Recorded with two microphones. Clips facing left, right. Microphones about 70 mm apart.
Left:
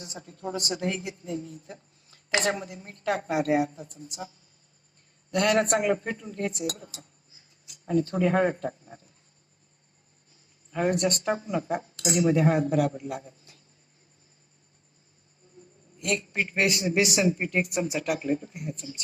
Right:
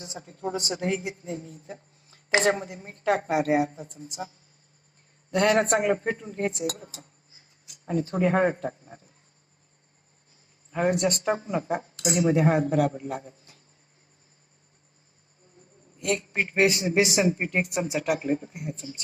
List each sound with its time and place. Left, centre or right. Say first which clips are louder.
0.1 s a woman's voice: right 3 dB; right
1.7 s speech: right 3 dB; right
5.3 s speech: right 2 dB; right
8.1 s speech: right 3 dB; right
10.7 s speech: right 1 dB; right
16.0 s speech: right 1 dB; right